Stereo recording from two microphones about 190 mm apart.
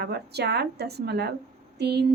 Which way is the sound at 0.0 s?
60° right (ahead or behind).